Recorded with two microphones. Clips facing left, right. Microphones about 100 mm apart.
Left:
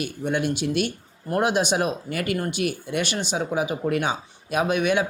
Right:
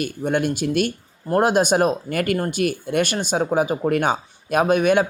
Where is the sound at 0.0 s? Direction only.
50° right (ahead or behind).